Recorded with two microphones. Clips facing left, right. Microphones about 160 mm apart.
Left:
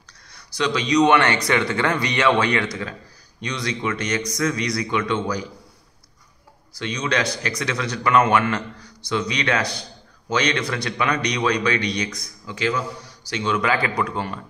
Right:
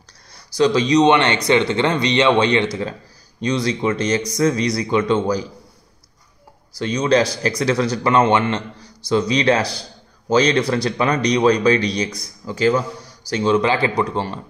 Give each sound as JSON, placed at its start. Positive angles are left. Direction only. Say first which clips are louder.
{"t": 0.3, "sound": "a man's voice", "louder": "right 7 dB", "side_deg": -35}
{"t": 6.8, "sound": "a man's voice", "louder": "right 7 dB", "side_deg": -35}